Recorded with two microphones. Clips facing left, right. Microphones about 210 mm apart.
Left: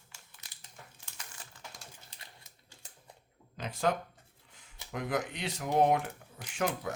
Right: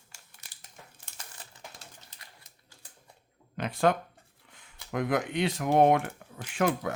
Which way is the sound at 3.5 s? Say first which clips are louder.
Right 5 dB; 65° right (ahead or behind).